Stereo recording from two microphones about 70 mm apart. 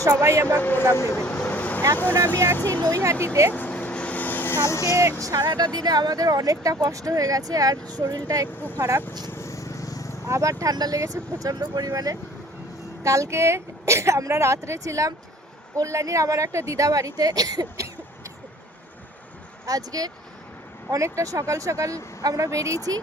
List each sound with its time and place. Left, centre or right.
0.1 s speech: right
0.4 s a man's voice: left
0.9 s speech: left
1.2 s vehicle: centre
2.0 s a man's voice: left
3.0 s a woman's voice: right
3.5 s vehicle: left
5.4 s speech: right
8.5 s a man's voice: left
9.3 s vehicle: left
10.2 s speech: right
11.0 s a woman's voice: right
19.6 s speech: right
20.9 s a woman's voice: right